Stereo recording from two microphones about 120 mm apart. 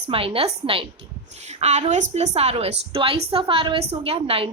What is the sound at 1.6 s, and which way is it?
A woman's voice, 75° right (ahead or behind).